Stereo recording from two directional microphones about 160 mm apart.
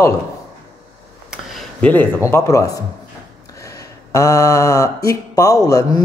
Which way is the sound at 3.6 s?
20° left (ahead or behind).